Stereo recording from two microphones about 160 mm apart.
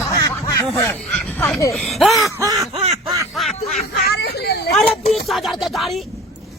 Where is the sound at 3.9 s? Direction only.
90° left.